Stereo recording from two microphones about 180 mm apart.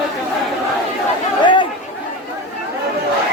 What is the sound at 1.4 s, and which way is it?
Chatter, 25° left (ahead or behind).